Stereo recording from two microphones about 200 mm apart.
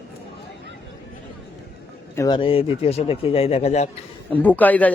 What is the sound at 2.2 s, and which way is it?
Speech, 20° left (ahead or behind).